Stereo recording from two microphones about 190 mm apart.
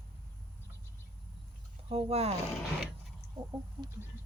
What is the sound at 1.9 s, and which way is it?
Speech, 30° right (ahead or behind).